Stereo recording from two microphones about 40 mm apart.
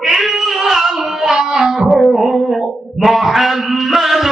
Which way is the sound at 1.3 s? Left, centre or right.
Centre.